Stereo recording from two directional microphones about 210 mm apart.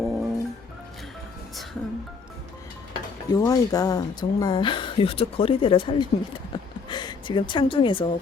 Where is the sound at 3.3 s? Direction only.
15° left (ahead or behind).